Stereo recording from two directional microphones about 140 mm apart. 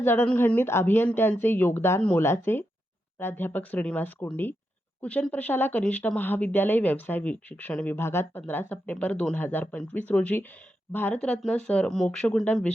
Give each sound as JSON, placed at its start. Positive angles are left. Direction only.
{"t": 0.0, "sound": "speech", "side_deg": 15}